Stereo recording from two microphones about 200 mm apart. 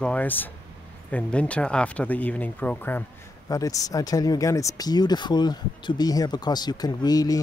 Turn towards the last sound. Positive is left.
turn(degrees=20)  # may be behind; listen again after turning